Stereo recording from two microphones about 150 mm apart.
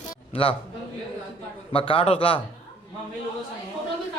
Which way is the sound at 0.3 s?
40° left (ahead or behind).